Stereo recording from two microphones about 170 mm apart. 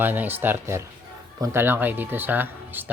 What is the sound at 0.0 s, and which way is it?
A man's voice, 10° right (ahead or behind).